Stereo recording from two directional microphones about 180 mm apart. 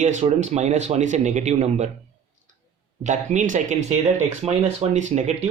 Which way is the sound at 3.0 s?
40° right (ahead or behind).